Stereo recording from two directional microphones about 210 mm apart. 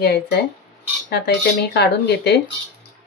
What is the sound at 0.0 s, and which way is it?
A woman's voice, 45° left (ahead or behind).